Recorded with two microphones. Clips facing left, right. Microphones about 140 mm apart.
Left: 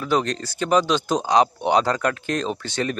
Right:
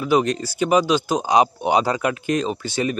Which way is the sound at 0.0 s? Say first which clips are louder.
Right 4 dB; 10° right (ahead or behind).